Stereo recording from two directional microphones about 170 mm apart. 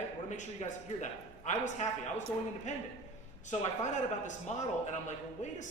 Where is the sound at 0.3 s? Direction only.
45° left (ahead or behind).